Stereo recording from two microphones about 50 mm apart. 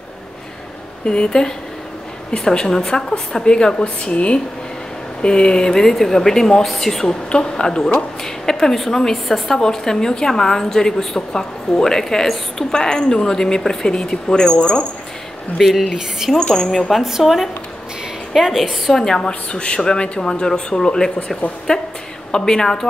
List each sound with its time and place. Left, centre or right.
1.0 s speech: centre
15.6 s speech: centre
16.3 s speech: centre
16.9 s a woman's voice: centre
18.9 s a woman's voice: centre